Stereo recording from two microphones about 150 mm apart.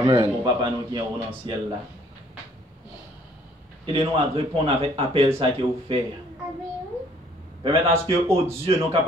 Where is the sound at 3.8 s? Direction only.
35° right (ahead or behind).